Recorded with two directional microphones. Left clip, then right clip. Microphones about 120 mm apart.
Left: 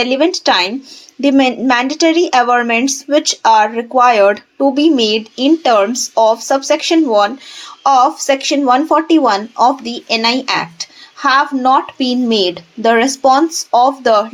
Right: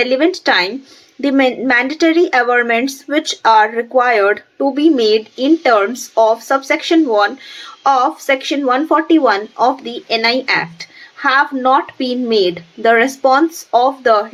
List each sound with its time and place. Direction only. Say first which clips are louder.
0.0 s speech: left 1 dB; 35° left (ahead or behind)